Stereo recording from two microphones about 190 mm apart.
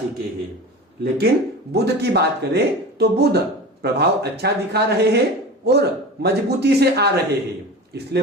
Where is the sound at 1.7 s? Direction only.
60° right (ahead or behind).